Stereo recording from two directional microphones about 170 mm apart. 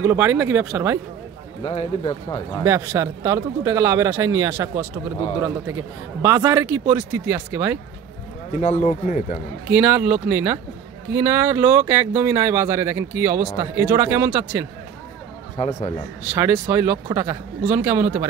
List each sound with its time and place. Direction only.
0.0 s speech: 15° right (ahead or behind)
1.6 s speech: 35° left (ahead or behind)
2.6 s speech: 15° right (ahead or behind)
8.5 s speech: 45° left (ahead or behind)
9.7 s speech: 10° right (ahead or behind)
15.5 s speech: 35° left (ahead or behind)
16.3 s speech: 10° right (ahead or behind)